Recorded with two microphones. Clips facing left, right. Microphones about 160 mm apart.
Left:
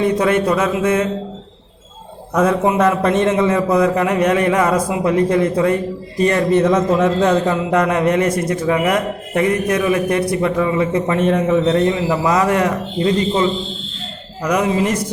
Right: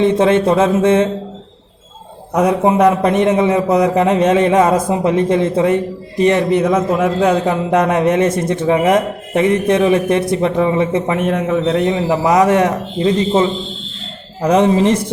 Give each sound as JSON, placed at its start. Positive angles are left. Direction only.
{"t": 0.0, "sound": "a man's voice", "side_deg": -25}
{"t": 2.3, "sound": "a man's voice", "side_deg": -20}
{"t": 6.7, "sound": "a man's voice", "side_deg": -5}
{"t": 11.2, "sound": "a man's voice", "side_deg": 0}
{"t": 11.8, "sound": "a man's voice", "side_deg": -20}